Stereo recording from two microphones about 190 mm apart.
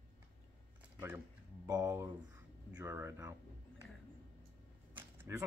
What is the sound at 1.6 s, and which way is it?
Speech, 15° right (ahead or behind).